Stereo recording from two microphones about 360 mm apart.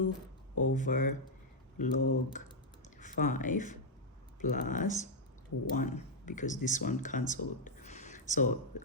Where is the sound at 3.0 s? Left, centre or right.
Left.